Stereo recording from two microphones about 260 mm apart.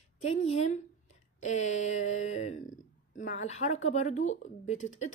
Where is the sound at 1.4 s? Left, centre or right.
Left.